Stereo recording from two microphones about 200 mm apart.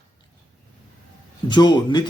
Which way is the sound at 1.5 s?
20° left (ahead or behind).